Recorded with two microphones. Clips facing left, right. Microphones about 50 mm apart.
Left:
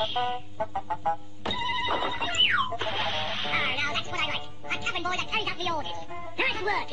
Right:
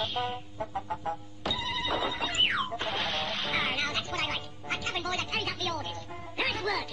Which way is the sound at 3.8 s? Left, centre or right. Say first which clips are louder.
Left 2 dB; left.